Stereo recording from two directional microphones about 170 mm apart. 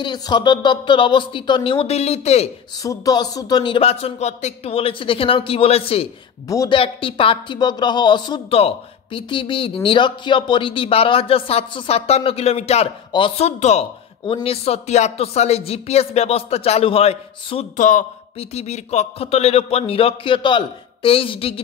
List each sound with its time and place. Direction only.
0.0 s a woman's voice: 25° left (ahead or behind)
2.8 s speech: 20° left (ahead or behind)
17.7 s a man's voice: 50° left (ahead or behind)
18.4 s speech: 40° left (ahead or behind)